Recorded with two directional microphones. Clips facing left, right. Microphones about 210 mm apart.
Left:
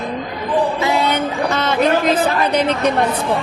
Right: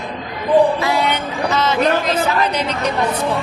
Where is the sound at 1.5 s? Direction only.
55° left (ahead or behind).